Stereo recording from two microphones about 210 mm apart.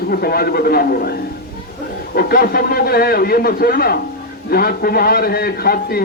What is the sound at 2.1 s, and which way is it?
A man's voice, 45° left (ahead or behind).